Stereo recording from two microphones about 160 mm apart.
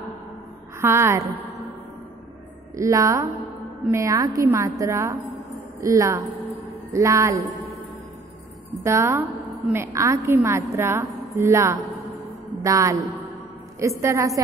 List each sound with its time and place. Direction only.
0.7 s a woman's voice: 15° right (ahead or behind)
2.7 s a woman's voice: 20° right (ahead or behind)
8.8 s a woman's voice: 20° right (ahead or behind)